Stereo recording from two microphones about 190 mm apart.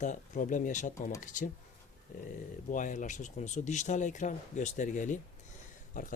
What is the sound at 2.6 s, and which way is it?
Speech, 45° left (ahead or behind).